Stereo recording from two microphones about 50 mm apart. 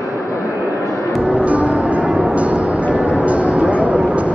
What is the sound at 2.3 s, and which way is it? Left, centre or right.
Music, right.